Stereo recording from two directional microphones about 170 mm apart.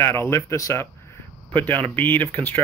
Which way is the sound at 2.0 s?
10° left (ahead or behind).